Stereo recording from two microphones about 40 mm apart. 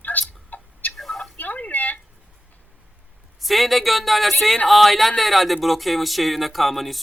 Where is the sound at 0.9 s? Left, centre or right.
Centre.